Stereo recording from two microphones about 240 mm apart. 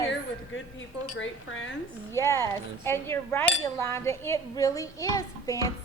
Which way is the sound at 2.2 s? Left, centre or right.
Centre.